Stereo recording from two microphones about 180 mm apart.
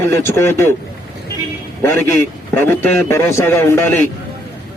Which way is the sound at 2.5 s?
10° left (ahead or behind).